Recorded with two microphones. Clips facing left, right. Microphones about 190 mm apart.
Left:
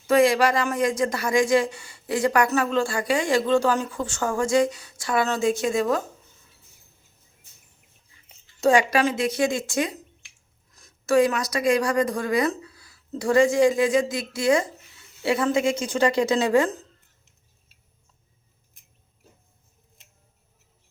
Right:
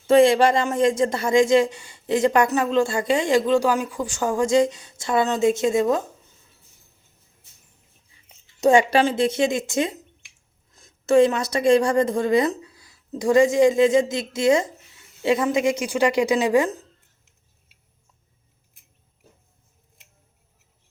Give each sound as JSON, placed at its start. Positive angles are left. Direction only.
{"t": 0.1, "sound": "speech", "side_deg": -25}
{"t": 8.6, "sound": "speech", "side_deg": -25}